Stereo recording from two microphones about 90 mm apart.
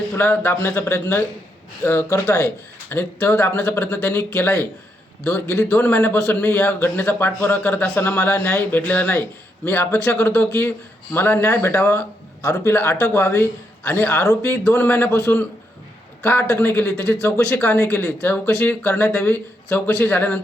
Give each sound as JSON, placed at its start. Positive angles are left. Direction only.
{"t": 0.2, "sound": "a man's voice", "side_deg": 25}
{"t": 5.5, "sound": "a man's voice", "side_deg": 15}
{"t": 11.9, "sound": "a sound", "side_deg": 15}
{"t": 12.5, "sound": "a man's voice", "side_deg": 30}
{"t": 16.2, "sound": "a man's voice", "side_deg": 25}
{"t": 17.6, "sound": "a man's voice", "side_deg": 30}